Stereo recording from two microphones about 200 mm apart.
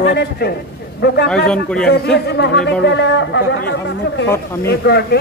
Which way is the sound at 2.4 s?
60° left (ahead or behind).